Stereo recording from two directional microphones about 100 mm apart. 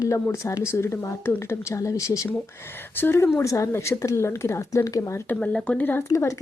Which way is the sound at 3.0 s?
20° left (ahead or behind).